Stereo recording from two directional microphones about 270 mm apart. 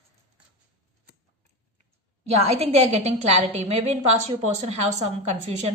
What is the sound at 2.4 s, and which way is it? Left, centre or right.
A woman's voice, right.